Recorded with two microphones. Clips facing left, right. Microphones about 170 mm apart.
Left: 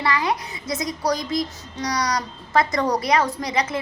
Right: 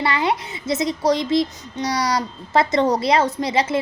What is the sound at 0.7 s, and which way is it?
A child's voice, 25° right (ahead or behind).